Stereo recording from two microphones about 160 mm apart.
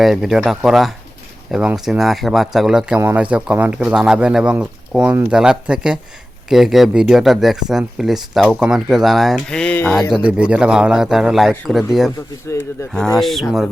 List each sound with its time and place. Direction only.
0.0 s speech: centre (ahead or behind)
9.9 s speech: centre (ahead or behind)
12.5 s speech: 20° left (ahead or behind)
13.1 s speech: centre (ahead or behind)